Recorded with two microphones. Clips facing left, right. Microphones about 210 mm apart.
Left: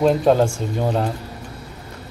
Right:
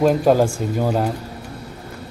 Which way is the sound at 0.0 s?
5° right (ahead or behind).